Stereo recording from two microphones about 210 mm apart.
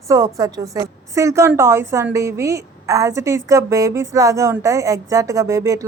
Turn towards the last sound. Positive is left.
turn(degrees=-15)  # may be behind; listen again after turning